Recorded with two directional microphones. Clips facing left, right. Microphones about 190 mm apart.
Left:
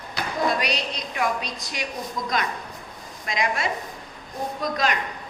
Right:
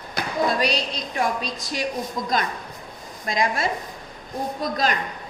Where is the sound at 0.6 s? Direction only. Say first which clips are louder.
Right 3 dB; 30° right (ahead or behind).